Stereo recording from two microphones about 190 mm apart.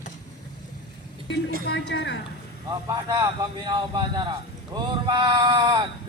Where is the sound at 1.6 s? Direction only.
65° left (ahead or behind).